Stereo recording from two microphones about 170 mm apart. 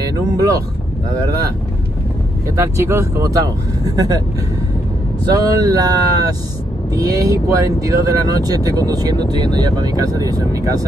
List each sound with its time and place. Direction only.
0.0 s speech: 20° right (ahead or behind)
2.4 s speech: 20° right (ahead or behind)
5.2 s speech: 20° right (ahead or behind)